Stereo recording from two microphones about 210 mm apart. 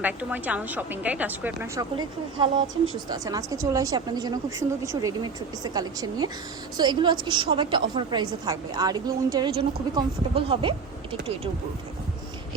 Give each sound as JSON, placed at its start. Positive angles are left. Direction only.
{"t": 0.0, "sound": "a woman's voice", "side_deg": -10}